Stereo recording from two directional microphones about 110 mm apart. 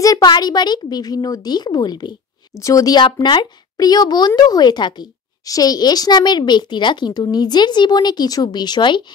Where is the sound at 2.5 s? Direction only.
30° left (ahead or behind).